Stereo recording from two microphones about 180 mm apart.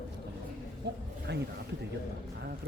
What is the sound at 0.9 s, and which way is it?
Speech, 65° right (ahead or behind).